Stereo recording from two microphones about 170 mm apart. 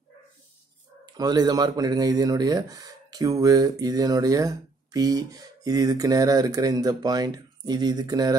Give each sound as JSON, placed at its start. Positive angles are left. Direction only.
{"t": 1.0, "sound": "speech", "side_deg": -25}